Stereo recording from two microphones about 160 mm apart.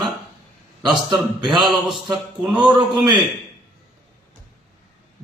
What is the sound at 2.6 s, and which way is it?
Speech, 30° right (ahead or behind).